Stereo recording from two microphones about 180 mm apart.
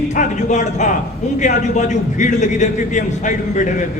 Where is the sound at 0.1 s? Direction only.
40° left (ahead or behind).